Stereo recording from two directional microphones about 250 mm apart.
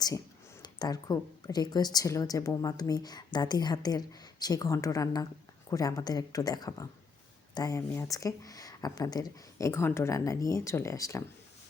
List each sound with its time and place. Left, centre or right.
0.6 s speech: centre